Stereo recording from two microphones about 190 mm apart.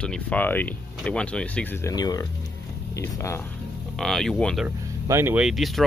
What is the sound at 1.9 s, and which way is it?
Speech, 20° left (ahead or behind).